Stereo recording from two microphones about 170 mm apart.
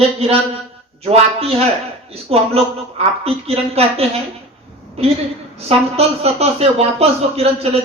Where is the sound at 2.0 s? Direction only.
35° right (ahead or behind).